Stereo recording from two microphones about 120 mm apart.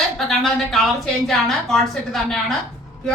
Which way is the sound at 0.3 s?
Centre (ahead or behind).